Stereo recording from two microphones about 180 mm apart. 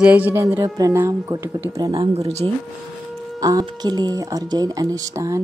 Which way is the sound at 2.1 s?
35° right (ahead or behind).